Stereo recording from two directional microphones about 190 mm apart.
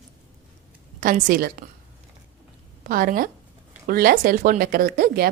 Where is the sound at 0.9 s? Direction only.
45° right (ahead or behind).